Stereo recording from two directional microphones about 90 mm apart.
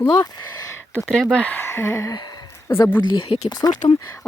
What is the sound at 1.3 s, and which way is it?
Speech, 15° left (ahead or behind).